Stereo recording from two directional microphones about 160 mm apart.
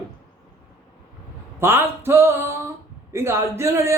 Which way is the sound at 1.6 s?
15° right (ahead or behind).